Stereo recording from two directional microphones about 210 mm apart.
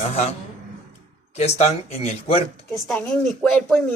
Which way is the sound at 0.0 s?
30° left (ahead or behind).